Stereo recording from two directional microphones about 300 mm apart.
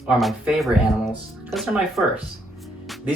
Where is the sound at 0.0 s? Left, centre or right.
Centre.